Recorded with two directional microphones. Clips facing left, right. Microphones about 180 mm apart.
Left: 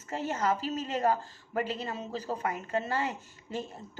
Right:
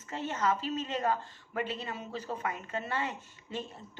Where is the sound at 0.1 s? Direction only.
40° left (ahead or behind).